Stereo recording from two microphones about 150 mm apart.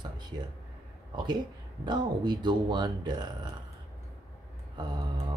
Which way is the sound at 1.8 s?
30° right (ahead or behind).